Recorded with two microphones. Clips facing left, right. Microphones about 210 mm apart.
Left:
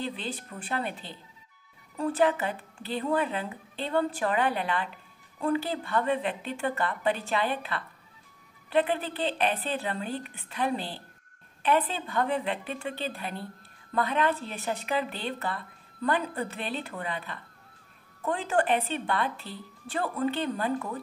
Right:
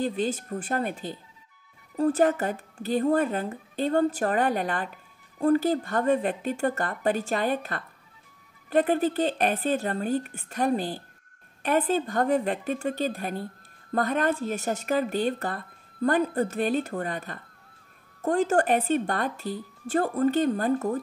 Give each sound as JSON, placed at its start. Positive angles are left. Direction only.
{"t": 0.0, "sound": "speech", "side_deg": -45}